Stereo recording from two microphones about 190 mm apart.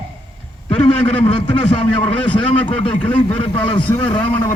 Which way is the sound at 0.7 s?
30° left (ahead or behind).